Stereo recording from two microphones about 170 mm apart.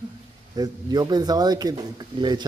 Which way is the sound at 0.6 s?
25° right (ahead or behind).